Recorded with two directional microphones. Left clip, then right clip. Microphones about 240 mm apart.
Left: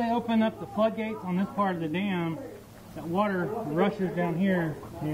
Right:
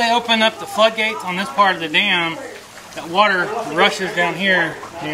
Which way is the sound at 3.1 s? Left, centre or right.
Centre.